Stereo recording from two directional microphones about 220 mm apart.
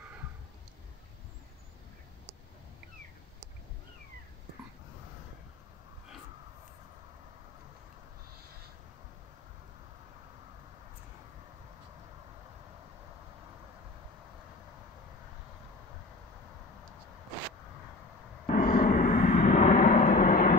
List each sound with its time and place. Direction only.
18.6 s vehicle: 35° left (ahead or behind)